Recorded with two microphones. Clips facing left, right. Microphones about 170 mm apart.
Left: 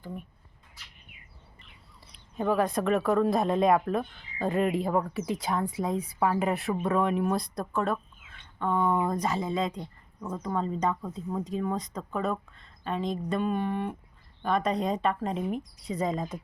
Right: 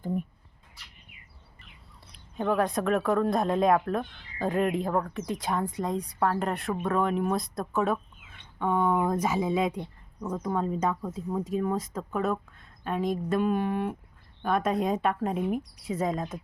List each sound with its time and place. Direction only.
0.0 s speech: 45° right (ahead or behind)
2.0 s speech: centre (ahead or behind)